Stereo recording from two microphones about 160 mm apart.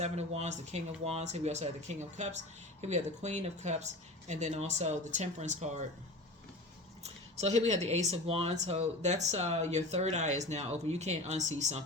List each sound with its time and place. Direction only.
0.0 s speech: 45° right (ahead or behind)
7.0 s a sound: 40° right (ahead or behind)
7.9 s speech: 45° right (ahead or behind)